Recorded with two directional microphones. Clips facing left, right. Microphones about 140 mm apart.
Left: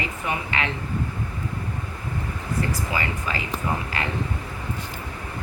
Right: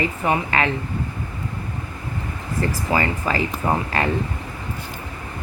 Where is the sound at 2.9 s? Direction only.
45° right (ahead or behind).